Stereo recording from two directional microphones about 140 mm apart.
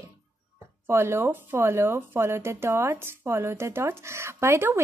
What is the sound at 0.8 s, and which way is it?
A woman's voice, 15° right (ahead or behind).